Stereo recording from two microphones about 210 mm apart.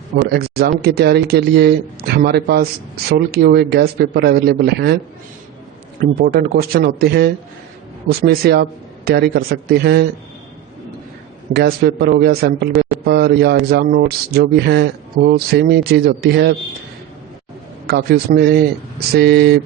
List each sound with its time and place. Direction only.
0.2 s speech: 50° right (ahead or behind)
6.0 s speech: 45° right (ahead or behind)
11.5 s speech: 55° right (ahead or behind)
17.8 s speech: 50° right (ahead or behind)